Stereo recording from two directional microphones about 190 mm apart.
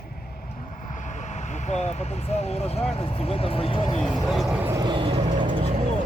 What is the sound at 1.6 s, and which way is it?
Speech, 35° left (ahead or behind).